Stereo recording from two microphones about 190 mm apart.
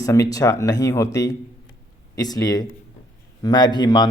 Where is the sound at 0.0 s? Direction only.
20° left (ahead or behind).